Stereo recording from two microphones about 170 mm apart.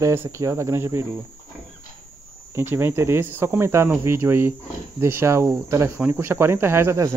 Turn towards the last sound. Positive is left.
turn(degrees=-15)  # may be behind; listen again after turning